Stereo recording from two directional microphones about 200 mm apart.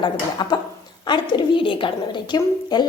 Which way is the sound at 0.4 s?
20° left (ahead or behind).